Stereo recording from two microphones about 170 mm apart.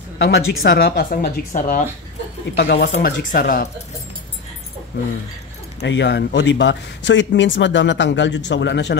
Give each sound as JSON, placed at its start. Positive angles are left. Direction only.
{"t": 0.2, "sound": "speech", "side_deg": 80}
{"t": 2.5, "sound": "speech", "side_deg": 70}
{"t": 2.9, "sound": "speech", "side_deg": 55}
{"t": 5.8, "sound": "speech", "side_deg": 90}